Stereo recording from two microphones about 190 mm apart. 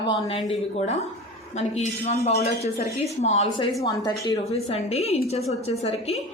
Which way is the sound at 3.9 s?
20° left (ahead or behind).